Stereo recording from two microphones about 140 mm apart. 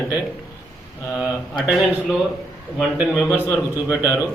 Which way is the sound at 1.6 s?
5° right (ahead or behind).